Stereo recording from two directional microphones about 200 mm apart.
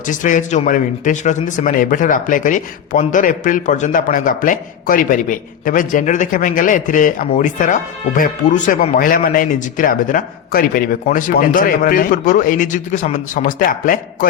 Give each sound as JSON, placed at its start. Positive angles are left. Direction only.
{"t": 0.1, "sound": "a man's voice", "side_deg": 40}